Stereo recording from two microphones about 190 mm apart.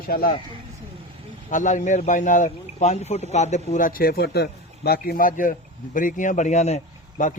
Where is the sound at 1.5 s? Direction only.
40° left (ahead or behind).